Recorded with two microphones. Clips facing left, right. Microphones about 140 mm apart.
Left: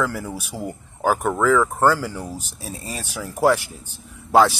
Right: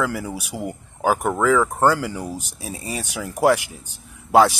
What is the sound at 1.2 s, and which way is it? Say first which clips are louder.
Speech: left 1 dB; 40° right (ahead or behind).